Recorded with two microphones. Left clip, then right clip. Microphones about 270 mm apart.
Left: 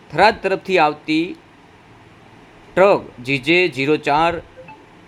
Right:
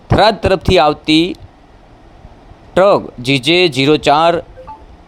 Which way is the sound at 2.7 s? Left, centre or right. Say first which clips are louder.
Right 4 dB; right.